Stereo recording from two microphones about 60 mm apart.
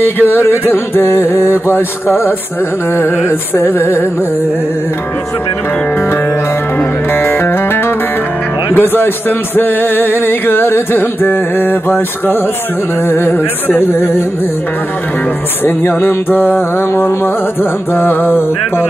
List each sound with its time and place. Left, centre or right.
0.0 s music: left
7.2 s music: left
15.6 s music: left